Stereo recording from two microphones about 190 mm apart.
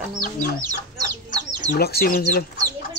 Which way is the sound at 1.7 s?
55° left (ahead or behind).